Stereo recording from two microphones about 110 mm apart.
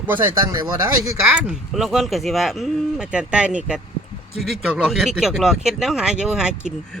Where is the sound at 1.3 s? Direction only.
5° right (ahead or behind).